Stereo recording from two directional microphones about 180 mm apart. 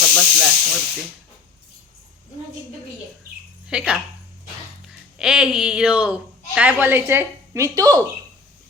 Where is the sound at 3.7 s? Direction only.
5° right (ahead or behind).